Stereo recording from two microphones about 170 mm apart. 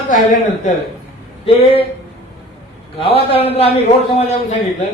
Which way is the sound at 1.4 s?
35° left (ahead or behind).